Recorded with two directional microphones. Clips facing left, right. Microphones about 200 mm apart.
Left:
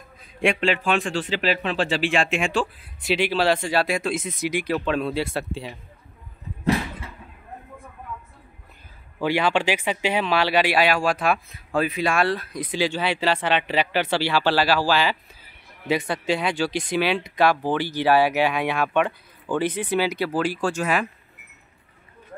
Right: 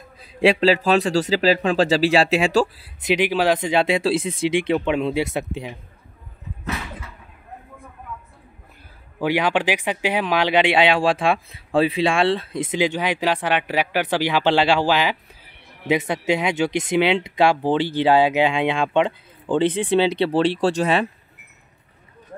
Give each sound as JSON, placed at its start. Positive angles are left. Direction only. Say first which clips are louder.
{"t": 0.2, "sound": "a man's voice", "louder": "right 6 dB", "side_deg": -35}
{"t": 3.1, "sound": "speech", "louder": "right 2 dB", "side_deg": -15}
{"t": 6.6, "sound": "a sound", "louder": "left 7 dB", "side_deg": 30}
{"t": 9.2, "sound": "a man's voice", "louder": "right 1 dB", "side_deg": -15}